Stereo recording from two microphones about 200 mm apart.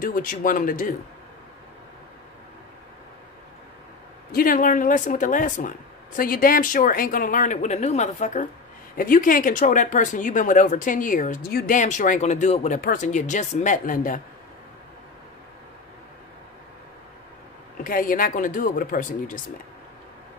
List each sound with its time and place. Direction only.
0.0 s speech: 45° left (ahead or behind)
4.3 s speech: 45° left (ahead or behind)
17.8 s speech: 45° left (ahead or behind)